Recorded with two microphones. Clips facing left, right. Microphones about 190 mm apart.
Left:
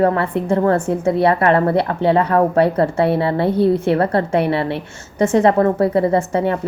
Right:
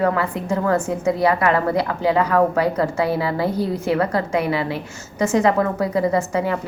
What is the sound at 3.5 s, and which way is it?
Speech, 60° left (ahead or behind).